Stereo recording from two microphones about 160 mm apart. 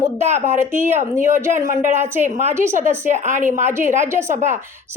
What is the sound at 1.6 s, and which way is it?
Speech, 50° right (ahead or behind).